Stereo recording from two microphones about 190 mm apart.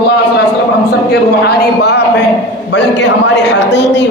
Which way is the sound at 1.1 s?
60° left (ahead or behind).